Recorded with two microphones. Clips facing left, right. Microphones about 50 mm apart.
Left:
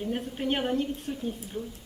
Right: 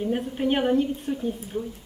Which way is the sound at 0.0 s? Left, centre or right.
Centre.